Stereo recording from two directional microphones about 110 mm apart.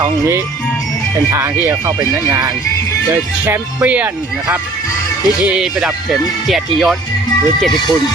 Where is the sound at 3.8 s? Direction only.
15° right (ahead or behind).